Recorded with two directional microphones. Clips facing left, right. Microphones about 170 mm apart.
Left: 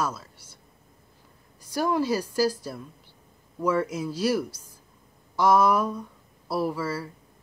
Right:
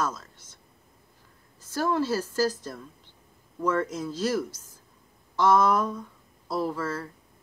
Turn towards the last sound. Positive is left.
turn(degrees=10)  # may be behind; listen again after turning